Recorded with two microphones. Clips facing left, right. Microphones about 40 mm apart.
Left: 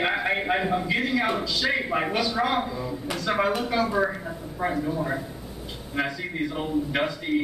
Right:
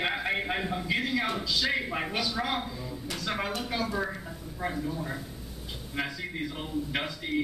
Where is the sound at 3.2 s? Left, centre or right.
Centre.